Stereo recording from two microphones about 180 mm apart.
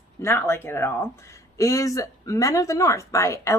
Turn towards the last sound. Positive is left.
turn(degrees=15)  # may be behind; listen again after turning